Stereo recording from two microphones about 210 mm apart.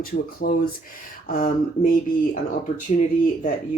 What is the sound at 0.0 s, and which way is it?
Speech, 45° left (ahead or behind).